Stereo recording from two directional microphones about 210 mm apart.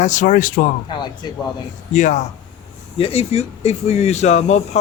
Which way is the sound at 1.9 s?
35° left (ahead or behind).